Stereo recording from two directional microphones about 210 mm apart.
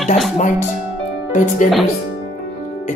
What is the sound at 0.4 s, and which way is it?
Speech, 35° left (ahead or behind).